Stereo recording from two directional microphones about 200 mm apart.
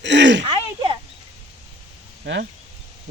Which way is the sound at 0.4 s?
25° right (ahead or behind).